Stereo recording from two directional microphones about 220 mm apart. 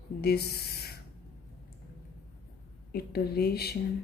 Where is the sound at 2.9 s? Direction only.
45° left (ahead or behind).